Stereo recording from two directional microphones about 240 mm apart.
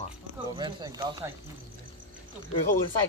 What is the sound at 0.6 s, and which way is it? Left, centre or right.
Speech, centre.